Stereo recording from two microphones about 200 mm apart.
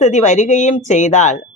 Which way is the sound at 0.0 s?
35° left (ahead or behind).